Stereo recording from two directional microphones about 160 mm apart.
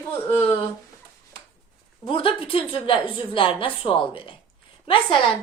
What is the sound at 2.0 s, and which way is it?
Speech, 35° left (ahead or behind).